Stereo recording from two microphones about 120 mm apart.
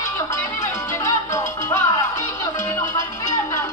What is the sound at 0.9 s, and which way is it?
Music, 25° left (ahead or behind).